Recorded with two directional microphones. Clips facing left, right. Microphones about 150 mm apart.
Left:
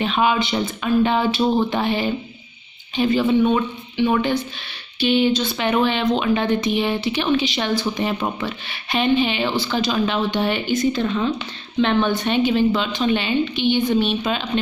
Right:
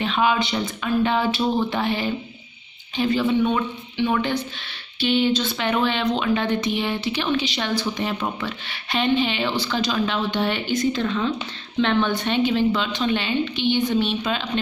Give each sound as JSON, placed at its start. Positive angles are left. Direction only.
{"t": 0.0, "sound": "a woman's voice", "side_deg": 20}